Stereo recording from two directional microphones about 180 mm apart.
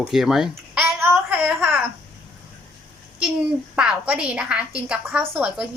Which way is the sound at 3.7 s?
5° right (ahead or behind).